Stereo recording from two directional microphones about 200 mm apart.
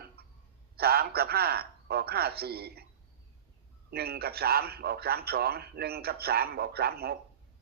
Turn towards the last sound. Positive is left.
turn(degrees=-50)  # may be behind; listen again after turning